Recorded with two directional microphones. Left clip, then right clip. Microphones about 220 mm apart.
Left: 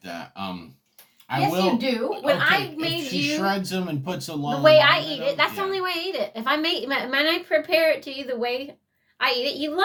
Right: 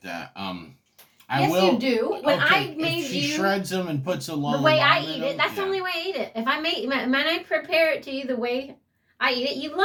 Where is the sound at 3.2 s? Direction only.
Centre (ahead or behind).